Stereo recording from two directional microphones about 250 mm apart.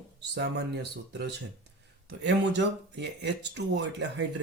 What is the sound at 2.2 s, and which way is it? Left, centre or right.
Speech, right.